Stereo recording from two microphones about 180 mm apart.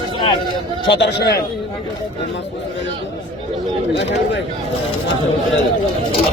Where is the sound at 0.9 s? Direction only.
65° left (ahead or behind).